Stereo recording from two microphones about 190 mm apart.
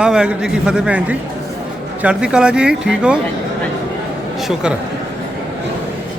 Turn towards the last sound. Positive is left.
turn(degrees=-5)  # may be behind; listen again after turning